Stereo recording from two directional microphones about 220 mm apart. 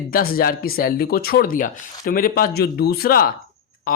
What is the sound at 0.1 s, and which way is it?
Speech, 40° left (ahead or behind).